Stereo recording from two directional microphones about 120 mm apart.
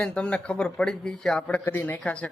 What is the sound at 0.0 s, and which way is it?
A man's voice, 10° left (ahead or behind).